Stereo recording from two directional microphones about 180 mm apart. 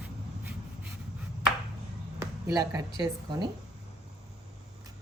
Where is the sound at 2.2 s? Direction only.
20° right (ahead or behind).